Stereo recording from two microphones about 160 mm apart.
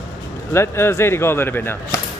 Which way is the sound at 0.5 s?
15° left (ahead or behind).